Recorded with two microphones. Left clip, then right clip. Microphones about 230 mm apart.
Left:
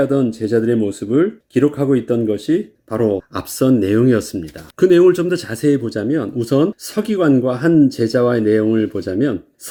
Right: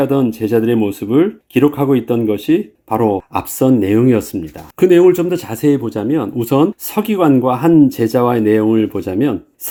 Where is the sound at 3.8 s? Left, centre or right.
Right.